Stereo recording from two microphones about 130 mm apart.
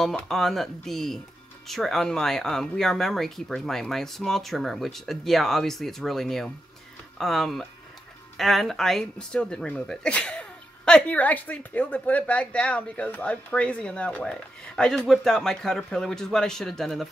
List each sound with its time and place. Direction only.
0.0 s speech: centre (ahead or behind)